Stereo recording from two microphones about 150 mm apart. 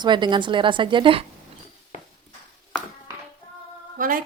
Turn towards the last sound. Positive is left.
turn(degrees=-65)  # may be behind; listen again after turning